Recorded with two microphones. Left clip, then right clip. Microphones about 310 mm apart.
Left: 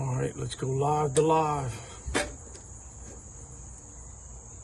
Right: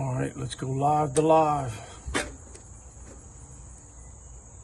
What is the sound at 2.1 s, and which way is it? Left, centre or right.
Cricket, centre.